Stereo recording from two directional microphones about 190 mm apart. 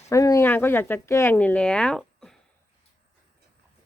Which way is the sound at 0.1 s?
15° left (ahead or behind).